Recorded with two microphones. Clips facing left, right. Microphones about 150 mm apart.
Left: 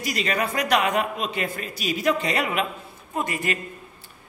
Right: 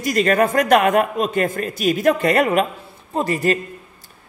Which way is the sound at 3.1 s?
35° right (ahead or behind).